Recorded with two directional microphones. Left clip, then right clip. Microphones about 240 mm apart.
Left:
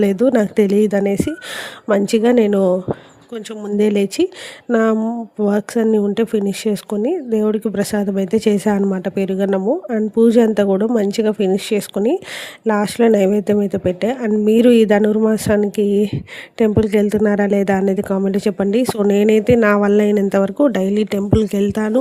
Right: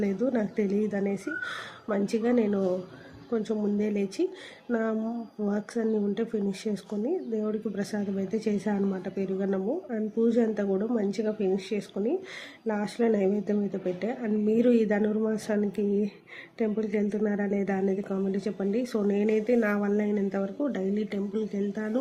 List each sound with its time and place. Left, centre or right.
0.0 s speech: left